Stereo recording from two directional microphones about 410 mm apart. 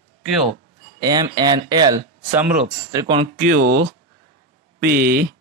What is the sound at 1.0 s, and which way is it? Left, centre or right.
Speech, centre.